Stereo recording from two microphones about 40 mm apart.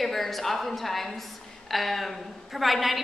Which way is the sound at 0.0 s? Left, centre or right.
Centre.